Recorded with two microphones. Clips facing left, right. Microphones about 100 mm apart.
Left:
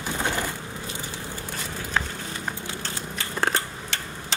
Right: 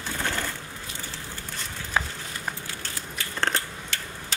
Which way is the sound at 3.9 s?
25° left (ahead or behind).